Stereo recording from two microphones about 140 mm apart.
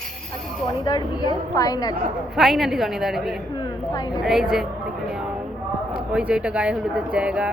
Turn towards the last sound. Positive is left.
turn(degrees=-10)  # may be behind; listen again after turning